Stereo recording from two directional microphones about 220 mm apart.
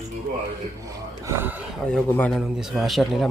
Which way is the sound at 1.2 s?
10° right (ahead or behind).